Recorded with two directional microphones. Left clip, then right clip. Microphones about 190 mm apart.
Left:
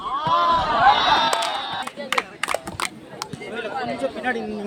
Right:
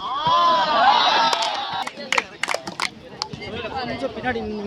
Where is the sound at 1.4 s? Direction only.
35° right (ahead or behind).